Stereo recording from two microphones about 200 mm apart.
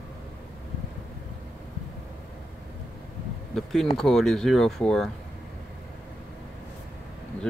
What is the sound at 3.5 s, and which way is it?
Speech, centre (ahead or behind).